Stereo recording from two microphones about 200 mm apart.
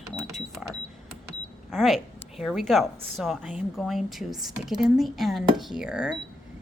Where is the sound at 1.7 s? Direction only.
Centre (ahead or behind).